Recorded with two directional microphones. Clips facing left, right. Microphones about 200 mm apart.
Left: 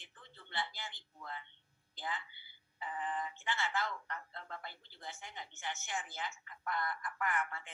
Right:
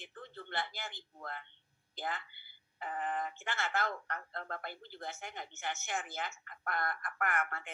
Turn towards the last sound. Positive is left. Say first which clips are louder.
# right 2 dB
turn(degrees=-55)  # may be behind; listen again after turning